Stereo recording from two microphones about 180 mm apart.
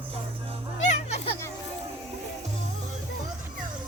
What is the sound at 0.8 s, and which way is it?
Music, 40° left (ahead or behind).